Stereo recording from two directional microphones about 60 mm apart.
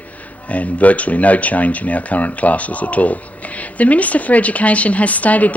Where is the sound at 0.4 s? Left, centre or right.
Left.